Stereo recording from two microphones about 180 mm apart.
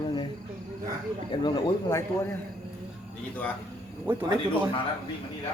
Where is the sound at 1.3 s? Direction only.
25° left (ahead or behind).